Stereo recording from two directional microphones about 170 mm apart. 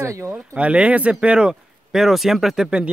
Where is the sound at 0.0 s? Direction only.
15° right (ahead or behind).